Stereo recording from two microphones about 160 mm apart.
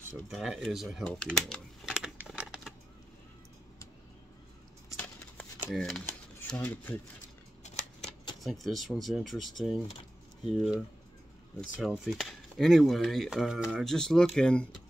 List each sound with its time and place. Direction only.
0.3 s speech: 5° right (ahead or behind)
0.6 s typing: centre (ahead or behind)
4.8 s a sound: 10° left (ahead or behind)
5.7 s speech: centre (ahead or behind)
7.6 s shuffling cards: 45° left (ahead or behind)
8.5 s speech: centre (ahead or behind)
9.8 s a sound: 35° left (ahead or behind)
11.8 s speech: centre (ahead or behind)